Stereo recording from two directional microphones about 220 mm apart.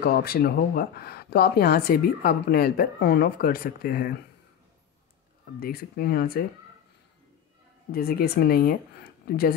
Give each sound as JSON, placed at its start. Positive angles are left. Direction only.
{"t": 0.0, "sound": "speech", "side_deg": 45}
{"t": 5.6, "sound": "speech", "side_deg": 45}
{"t": 7.9, "sound": "speech", "side_deg": 45}